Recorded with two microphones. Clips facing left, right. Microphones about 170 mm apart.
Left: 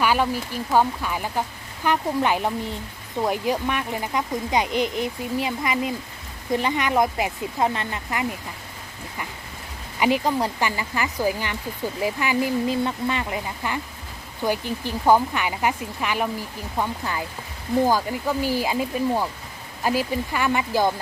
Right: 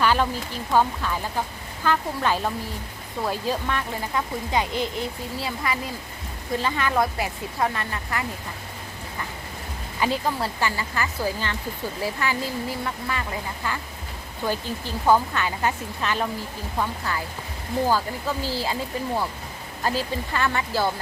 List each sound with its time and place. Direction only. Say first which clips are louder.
0.0 s a sound: even; 10° left (ahead or behind)
0.7 s speech: left 1 dB; 15° left (ahead or behind)
10.0 s speech: left 4 dB; 15° left (ahead or behind)